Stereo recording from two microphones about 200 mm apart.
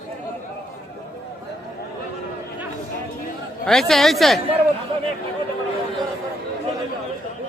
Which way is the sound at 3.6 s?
Centre (ahead or behind).